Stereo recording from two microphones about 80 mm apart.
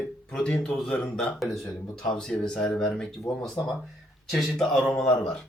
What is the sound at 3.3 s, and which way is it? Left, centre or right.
Speech, left.